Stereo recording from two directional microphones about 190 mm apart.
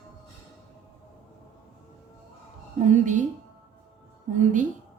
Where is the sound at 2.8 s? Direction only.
40° right (ahead or behind).